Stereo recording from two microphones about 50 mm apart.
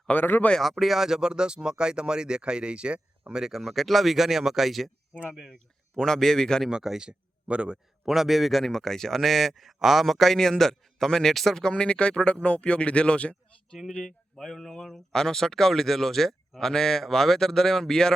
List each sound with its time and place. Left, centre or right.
0.1 s speech: left
0.6 s speech: centre; by 3.4 s right
3.4 s speech: centre
5.5 s speech: centre
6.7 s speech: centre
8.0 s speech: centre
11.7 s speech: left
14.0 s speech: centre